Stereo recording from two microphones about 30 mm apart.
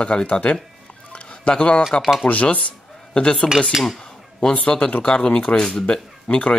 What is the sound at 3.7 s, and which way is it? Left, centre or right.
Speech, centre.